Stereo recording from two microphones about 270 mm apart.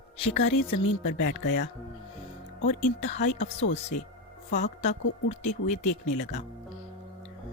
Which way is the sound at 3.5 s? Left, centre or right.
Left.